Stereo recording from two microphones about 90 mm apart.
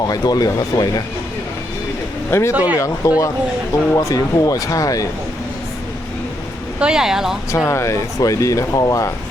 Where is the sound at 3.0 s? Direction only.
35° left (ahead or behind).